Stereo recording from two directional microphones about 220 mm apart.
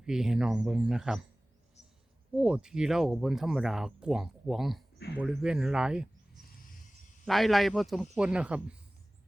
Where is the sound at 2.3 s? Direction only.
5° right (ahead or behind).